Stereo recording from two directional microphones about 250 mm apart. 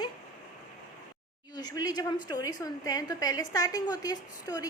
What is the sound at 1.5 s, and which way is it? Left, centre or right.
A woman's voice, centre.